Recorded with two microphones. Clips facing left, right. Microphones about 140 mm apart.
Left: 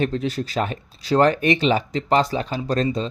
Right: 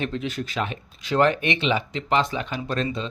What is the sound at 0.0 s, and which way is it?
Speech, 40° left (ahead or behind).